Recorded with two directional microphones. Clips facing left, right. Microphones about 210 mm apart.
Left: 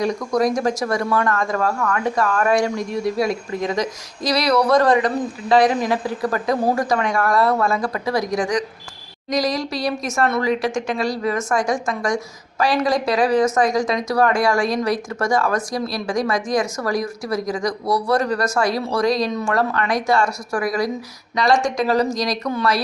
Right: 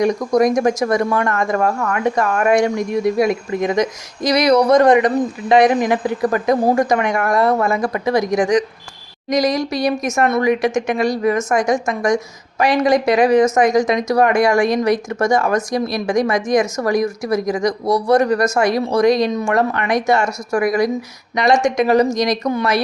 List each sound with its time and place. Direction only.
0.0 s speech: 20° right (ahead or behind)